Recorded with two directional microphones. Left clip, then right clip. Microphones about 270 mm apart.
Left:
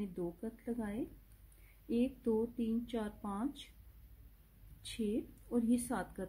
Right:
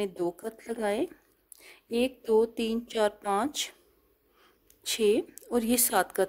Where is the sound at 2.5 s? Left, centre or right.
Right.